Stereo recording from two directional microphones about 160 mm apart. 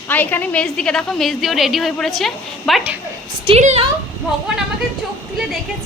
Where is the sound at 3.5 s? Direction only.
45° right (ahead or behind).